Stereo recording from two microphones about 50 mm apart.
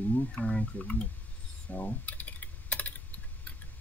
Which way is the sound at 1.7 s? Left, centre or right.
Left.